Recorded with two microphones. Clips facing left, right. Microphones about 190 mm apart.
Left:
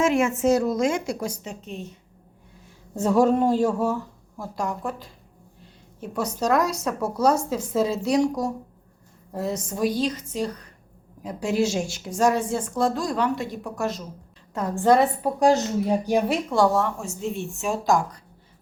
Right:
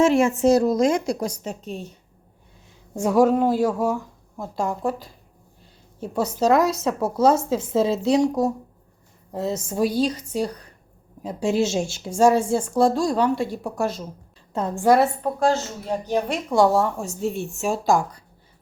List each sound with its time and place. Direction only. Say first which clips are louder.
0.0 s a woman's voice: right 3 dB; 35° right (ahead or behind)
2.9 s speech: right 1 dB; 10° right (ahead or behind)
4.5 s a woman's voice: right 4 dB; 30° right (ahead or behind)
6.4 s a woman's voice: right 4 dB; 25° right (ahead or behind)
14.8 s a woman's voice: right 1 dB; 5° right (ahead or behind)
15.2 s speech: left 2 dB; 15° left (ahead or behind)
16.7 s a woman's voice: right 3 dB; 35° right (ahead or behind)